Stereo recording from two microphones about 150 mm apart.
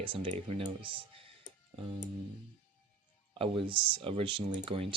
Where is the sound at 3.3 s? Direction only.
35° right (ahead or behind).